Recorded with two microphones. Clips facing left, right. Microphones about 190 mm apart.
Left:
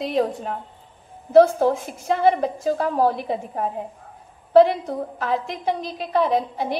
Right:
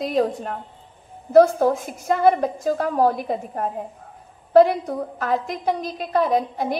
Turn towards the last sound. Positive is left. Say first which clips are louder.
# even
turn(degrees=-45)  # may be behind; listen again after turning